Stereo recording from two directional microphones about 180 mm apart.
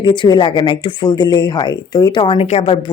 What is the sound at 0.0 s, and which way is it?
Speech, 25° left (ahead or behind).